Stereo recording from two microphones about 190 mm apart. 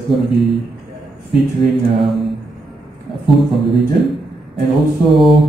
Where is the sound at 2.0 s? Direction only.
Centre (ahead or behind).